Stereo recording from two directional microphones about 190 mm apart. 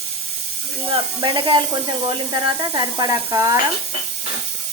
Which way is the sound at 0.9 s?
25° right (ahead or behind).